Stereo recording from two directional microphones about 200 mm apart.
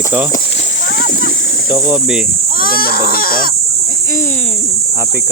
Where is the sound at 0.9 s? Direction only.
50° left (ahead or behind).